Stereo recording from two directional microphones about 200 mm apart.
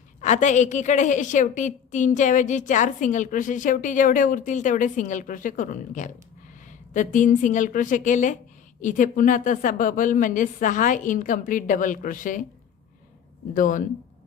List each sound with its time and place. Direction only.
0.2 s a woman's voice: 35° left (ahead or behind)
13.5 s a woman's voice: 40° left (ahead or behind)